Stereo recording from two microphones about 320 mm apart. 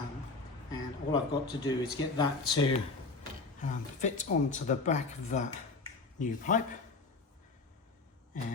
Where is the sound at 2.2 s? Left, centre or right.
Centre.